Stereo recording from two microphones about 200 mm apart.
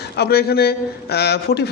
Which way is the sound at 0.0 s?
55° left (ahead or behind).